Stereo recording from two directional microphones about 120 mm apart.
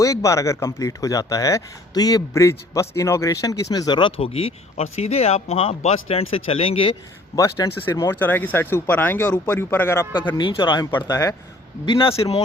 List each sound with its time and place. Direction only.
0.0 s speech: 25° left (ahead or behind)
4.2 s speech: 50° left (ahead or behind)
7.3 s speech: 25° left (ahead or behind)
10.3 s speech: 40° left (ahead or behind)
11.1 s speech: 30° left (ahead or behind)
11.9 s speech: 50° left (ahead or behind)